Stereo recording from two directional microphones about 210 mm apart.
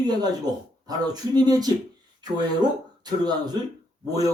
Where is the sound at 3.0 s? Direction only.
20° right (ahead or behind).